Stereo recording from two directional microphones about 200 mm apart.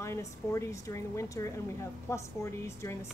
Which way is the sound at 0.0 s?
15° left (ahead or behind).